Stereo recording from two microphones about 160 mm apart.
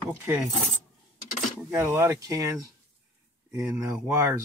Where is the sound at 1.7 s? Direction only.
15° right (ahead or behind).